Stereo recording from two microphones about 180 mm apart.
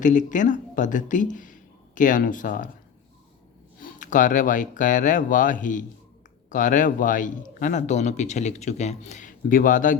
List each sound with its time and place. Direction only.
0.0 s speech: 45° left (ahead or behind)
3.8 s speech: 50° left (ahead or behind)